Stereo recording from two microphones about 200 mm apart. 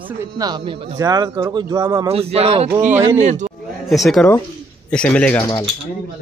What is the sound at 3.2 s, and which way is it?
Speech, 35° right (ahead or behind).